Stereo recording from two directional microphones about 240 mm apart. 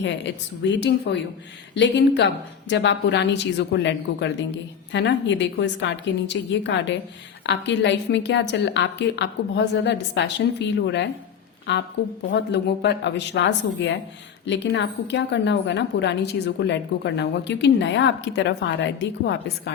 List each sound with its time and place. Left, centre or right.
0.6 s a woman's voice: left